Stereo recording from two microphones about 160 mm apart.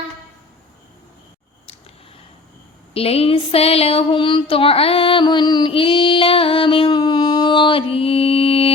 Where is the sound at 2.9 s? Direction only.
35° left (ahead or behind).